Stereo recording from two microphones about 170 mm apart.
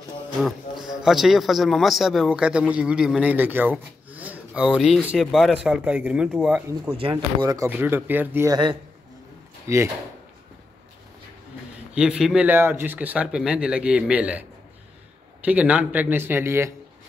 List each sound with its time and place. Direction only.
0.4 s a man's voice: centre (ahead or behind)
6.9 s speech: 30° right (ahead or behind)
7.5 s speech: 15° right (ahead or behind)
9.7 s speech: 15° right (ahead or behind)
11.9 s speech: 5° right (ahead or behind)
15.4 s speech: 10° right (ahead or behind)